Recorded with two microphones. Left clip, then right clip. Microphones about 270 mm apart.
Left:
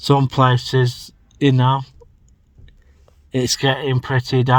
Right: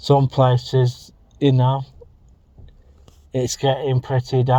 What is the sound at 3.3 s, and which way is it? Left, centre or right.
Speech, left.